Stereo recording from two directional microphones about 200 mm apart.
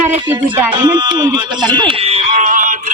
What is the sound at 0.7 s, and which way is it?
Speech, 20° right (ahead or behind).